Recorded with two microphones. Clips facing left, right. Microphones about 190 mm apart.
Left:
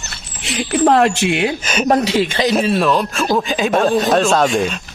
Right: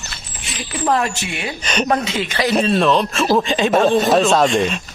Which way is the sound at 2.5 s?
Centre (ahead or behind).